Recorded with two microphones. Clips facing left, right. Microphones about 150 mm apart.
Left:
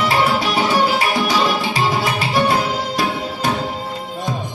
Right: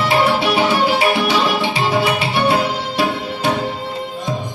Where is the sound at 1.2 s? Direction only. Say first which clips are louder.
Right 1 dB; 40° left (ahead or behind).